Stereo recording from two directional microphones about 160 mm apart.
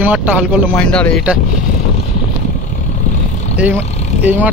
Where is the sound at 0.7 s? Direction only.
5° left (ahead or behind).